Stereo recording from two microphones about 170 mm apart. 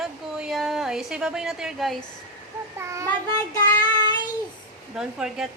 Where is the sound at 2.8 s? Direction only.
20° right (ahead or behind).